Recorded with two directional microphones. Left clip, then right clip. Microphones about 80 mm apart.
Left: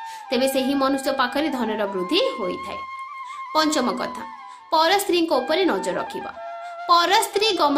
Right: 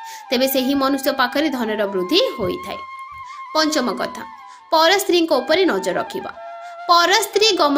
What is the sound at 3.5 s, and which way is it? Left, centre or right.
A woman's voice, centre.